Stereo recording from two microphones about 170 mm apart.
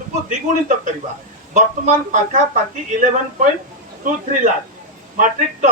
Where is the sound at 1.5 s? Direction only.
50° right (ahead or behind).